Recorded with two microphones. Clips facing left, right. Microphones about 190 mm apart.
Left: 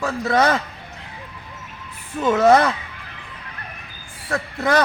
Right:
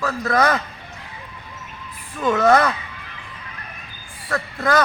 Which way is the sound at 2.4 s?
25° left (ahead or behind).